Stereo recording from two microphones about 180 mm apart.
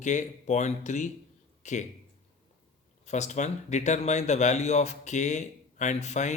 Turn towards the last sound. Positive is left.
turn(degrees=40)  # may be behind; listen again after turning